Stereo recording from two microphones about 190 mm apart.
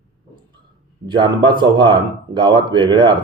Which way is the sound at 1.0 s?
25° right (ahead or behind).